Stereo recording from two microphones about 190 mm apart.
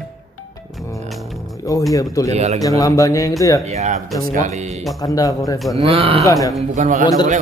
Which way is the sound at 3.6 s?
35° right (ahead or behind).